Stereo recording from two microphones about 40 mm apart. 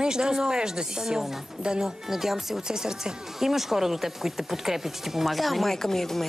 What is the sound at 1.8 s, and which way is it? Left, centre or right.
Speech, centre.